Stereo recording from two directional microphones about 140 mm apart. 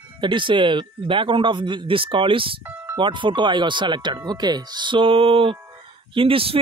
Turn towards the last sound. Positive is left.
turn(degrees=-40)  # may be behind; listen again after turning